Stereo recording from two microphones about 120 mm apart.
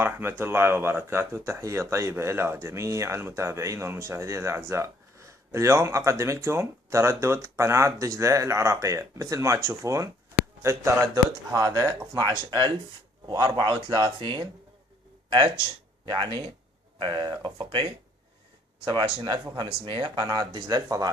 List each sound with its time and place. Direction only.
0.0 s speech: 20° right (ahead or behind); by 14.4 s 40° right (ahead or behind)
16.0 s speech: 40° right (ahead or behind)
18.9 s speech: 45° right (ahead or behind)